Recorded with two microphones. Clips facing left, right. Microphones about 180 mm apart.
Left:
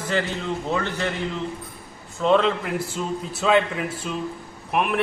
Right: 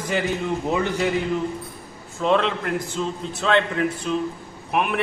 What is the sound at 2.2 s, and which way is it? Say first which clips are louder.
A man's voice: left 1 dB; centre (ahead or behind).